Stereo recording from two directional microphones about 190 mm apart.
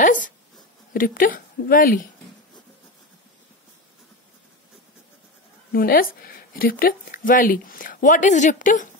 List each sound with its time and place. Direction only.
0.0 s a sound: 45° left (ahead or behind)
0.9 s speech: 50° left (ahead or behind)
5.7 s speech: 50° left (ahead or behind)